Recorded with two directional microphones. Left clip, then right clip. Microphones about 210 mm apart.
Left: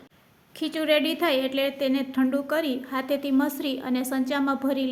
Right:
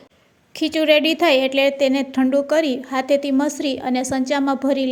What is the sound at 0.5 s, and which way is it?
A woman's voice, 25° right (ahead or behind).